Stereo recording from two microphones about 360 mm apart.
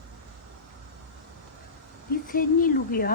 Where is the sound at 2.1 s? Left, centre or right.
Left.